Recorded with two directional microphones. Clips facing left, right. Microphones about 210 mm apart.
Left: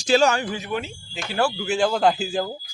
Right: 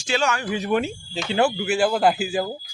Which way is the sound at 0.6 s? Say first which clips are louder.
Right 6 dB; 50° right (ahead or behind).